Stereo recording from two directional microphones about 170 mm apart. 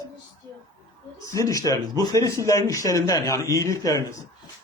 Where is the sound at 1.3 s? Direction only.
20° left (ahead or behind).